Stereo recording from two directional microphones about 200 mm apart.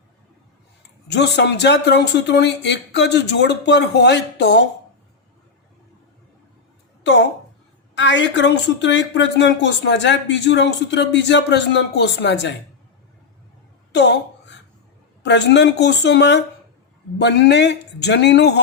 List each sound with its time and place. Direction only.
1.0 s a woman's voice: 60° left (ahead or behind)
7.0 s a woman's voice: 60° left (ahead or behind)
13.9 s a sound: 60° left (ahead or behind)
15.2 s a woman's voice: 60° left (ahead or behind)